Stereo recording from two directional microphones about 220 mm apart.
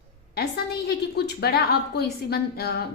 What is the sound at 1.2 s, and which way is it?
A woman's voice, 45° left (ahead or behind).